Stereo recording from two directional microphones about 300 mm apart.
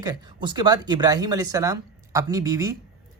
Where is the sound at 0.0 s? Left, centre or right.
Centre.